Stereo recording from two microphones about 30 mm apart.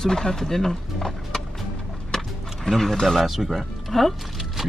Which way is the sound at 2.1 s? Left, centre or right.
Centre.